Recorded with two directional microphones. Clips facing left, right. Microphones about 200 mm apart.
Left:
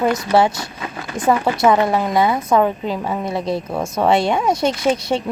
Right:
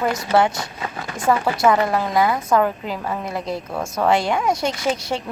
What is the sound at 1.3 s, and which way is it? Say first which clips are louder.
Speech: left 2 dB; 20° left (ahead or behind).